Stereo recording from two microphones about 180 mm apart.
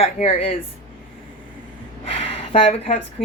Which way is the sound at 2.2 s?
30° left (ahead or behind).